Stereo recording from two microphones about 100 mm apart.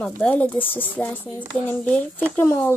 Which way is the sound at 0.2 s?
10° left (ahead or behind).